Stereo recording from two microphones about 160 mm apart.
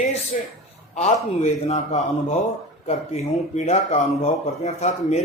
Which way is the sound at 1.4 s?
45° left (ahead or behind).